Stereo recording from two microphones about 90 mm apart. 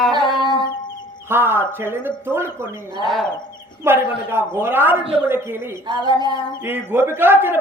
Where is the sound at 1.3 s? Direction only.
25° right (ahead or behind).